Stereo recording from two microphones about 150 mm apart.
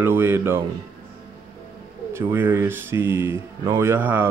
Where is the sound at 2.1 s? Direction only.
15° right (ahead or behind).